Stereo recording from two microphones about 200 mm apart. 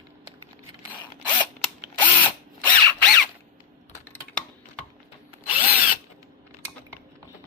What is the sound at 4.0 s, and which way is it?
Typing, 10° left (ahead or behind).